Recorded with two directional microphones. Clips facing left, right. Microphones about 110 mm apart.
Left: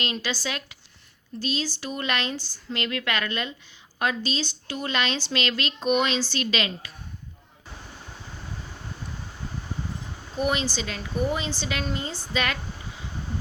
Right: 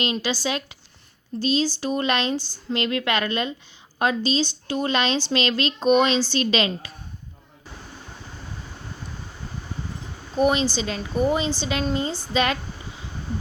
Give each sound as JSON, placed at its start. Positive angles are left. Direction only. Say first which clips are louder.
{"t": 0.0, "sound": "speech", "louder": "right 5 dB", "side_deg": -20}
{"t": 10.3, "sound": "speech", "louder": "right 6 dB", "side_deg": -25}